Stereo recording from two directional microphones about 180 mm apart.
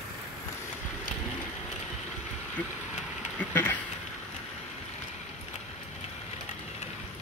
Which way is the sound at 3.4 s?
10° left (ahead or behind).